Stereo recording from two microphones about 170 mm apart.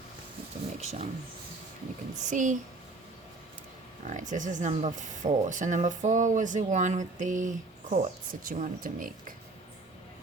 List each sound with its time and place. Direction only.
0.8 s speech: 40° right (ahead or behind)
2.2 s speech: 50° right (ahead or behind)
4.0 s speech: 45° right (ahead or behind)